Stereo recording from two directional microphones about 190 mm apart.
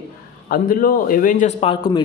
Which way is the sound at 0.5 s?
50° left (ahead or behind).